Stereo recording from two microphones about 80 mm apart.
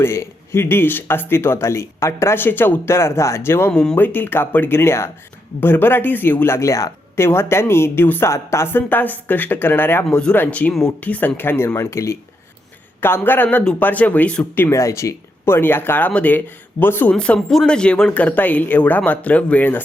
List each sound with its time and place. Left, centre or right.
0.0 s speech: left
3.7 s speech: centre
3.9 s speech: left
10.1 s speech: centre
10.3 s speech: left
14.7 s speech: left
17.1 s speech: centre